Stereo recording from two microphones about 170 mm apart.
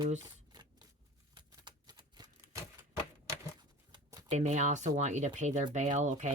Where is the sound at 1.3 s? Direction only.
25° right (ahead or behind).